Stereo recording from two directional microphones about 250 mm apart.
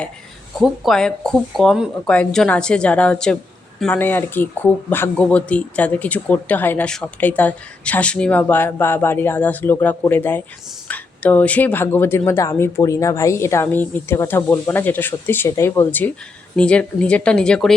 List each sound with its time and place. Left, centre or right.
0.6 s speech: centre